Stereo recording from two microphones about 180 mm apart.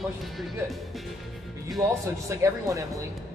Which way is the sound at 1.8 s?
15° right (ahead or behind).